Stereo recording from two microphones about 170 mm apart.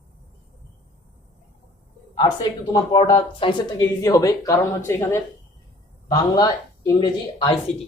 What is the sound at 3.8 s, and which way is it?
Speech, 20° left (ahead or behind).